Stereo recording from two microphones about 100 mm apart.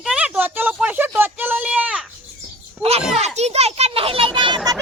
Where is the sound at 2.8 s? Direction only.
90° right; by 4.6 s 50° right (ahead or behind).